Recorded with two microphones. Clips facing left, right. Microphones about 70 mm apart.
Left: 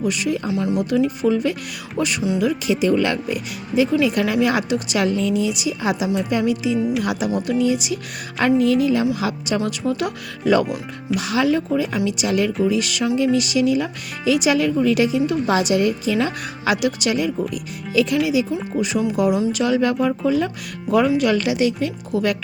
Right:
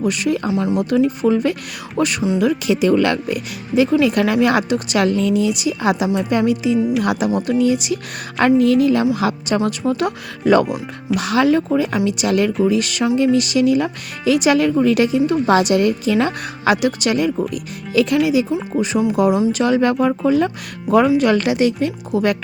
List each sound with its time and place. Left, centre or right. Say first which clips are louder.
0.0 s speech: right 3 dB; right
0.5 s speech: right 3 dB; right
0.8 s speech: right 3 dB; right